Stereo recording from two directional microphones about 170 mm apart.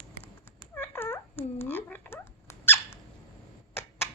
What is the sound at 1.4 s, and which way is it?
Squeak, 10° left (ahead or behind).